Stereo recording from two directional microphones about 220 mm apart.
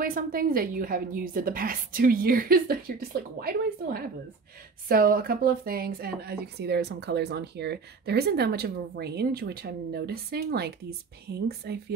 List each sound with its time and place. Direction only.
0.0 s a woman's voice: 40° right (ahead or behind)